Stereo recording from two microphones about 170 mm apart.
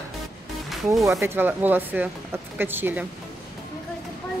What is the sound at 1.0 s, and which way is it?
Speech, 15° right (ahead or behind).